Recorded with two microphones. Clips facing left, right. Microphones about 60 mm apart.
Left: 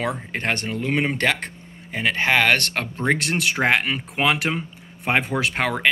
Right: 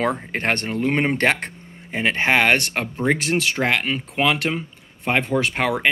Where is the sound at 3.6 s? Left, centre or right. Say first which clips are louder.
Left 1 dB; centre.